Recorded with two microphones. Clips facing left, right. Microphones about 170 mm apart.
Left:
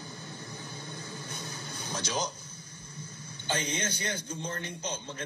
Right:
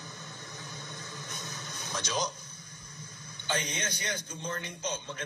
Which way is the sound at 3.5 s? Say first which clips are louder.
Left 1 dB; 30° left (ahead or behind).